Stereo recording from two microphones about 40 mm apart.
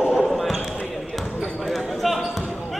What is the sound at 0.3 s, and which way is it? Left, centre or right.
Basketball bounce, centre.